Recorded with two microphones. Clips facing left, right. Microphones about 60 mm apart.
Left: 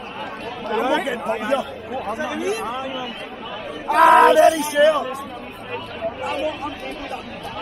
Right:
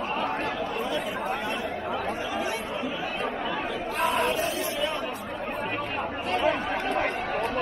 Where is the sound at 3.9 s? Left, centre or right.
Left.